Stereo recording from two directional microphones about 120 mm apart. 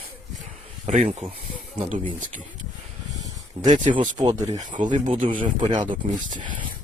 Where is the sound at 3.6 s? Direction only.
85° right.